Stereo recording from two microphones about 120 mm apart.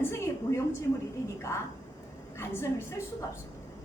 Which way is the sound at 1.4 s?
25° left (ahead or behind).